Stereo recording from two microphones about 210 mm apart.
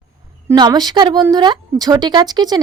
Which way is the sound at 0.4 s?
20° right (ahead or behind).